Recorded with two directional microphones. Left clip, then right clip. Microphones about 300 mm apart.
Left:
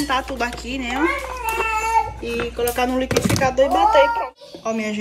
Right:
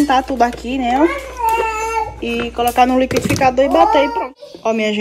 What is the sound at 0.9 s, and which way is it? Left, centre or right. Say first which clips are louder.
Babbling: right 5 dB; centre.